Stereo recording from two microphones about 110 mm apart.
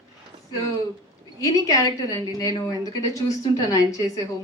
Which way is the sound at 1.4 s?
30° left (ahead or behind).